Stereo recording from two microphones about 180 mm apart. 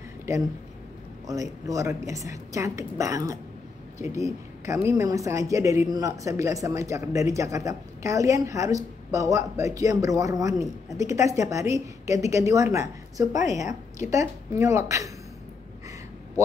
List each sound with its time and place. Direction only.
1.2 s a woman's voice: 20° right (ahead or behind)